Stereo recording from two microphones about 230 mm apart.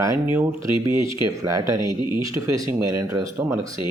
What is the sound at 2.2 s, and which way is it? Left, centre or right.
Speech, centre.